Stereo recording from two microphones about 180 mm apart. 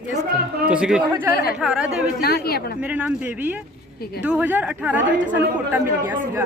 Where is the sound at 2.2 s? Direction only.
60° left (ahead or behind).